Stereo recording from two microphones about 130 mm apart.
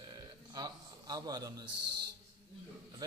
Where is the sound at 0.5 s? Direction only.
30° right (ahead or behind).